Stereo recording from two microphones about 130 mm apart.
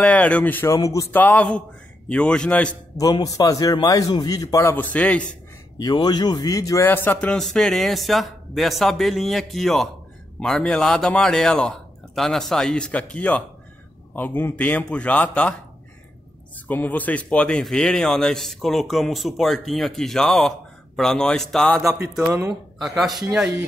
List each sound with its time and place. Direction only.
0.0 s speech: 10° left (ahead or behind)
0.7 s a man's voice: 25° left (ahead or behind); by 2.7 s 10° left (ahead or behind)
3.0 s a man's voice: 30° left (ahead or behind)
4.6 s a man's voice: 15° left (ahead or behind)
5.8 s a man's voice: 35° left (ahead or behind); by 15.5 s 10° left (ahead or behind)
16.6 s speech: 15° left (ahead or behind); by 23.5 s 5° right (ahead or behind)